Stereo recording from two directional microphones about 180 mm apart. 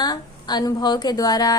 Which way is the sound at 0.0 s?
20° left (ahead or behind).